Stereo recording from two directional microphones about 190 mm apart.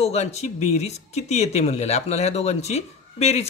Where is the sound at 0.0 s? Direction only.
35° left (ahead or behind).